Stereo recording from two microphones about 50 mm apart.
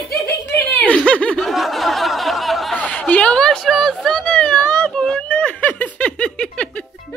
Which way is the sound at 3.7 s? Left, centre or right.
Centre.